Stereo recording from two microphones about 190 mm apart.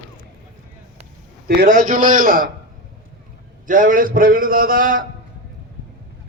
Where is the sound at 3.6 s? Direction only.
45° right (ahead or behind).